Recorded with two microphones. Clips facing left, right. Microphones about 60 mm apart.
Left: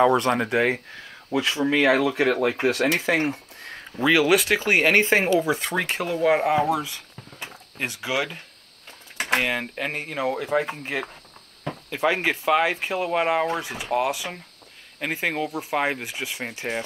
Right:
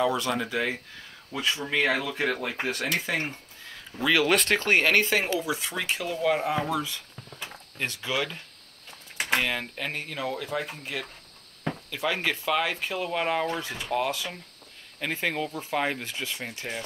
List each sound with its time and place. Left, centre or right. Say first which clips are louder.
0.0 s speech: left 7 dB; left
2.0 s speech: left 8 dB; left
3.9 s speech: left 4 dB; centre
4.9 s speech: left 5 dB; left
5.5 s speech: left 5 dB; left
6.5 s speech: left 6 dB; centre
9.4 s speech: left 4 dB; centre